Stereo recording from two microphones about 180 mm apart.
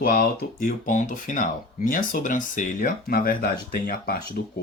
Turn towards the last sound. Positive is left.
turn(degrees=55)  # may be behind; listen again after turning